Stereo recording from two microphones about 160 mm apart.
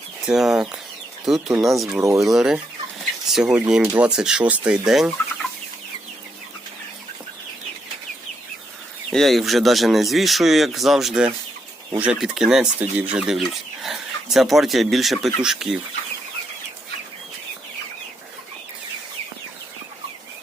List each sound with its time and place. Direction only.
0.3 s speech: centre (ahead or behind)
2.0 s speech: 20° right (ahead or behind)
2.2 s speech: centre (ahead or behind)
9.0 s speech: centre (ahead or behind)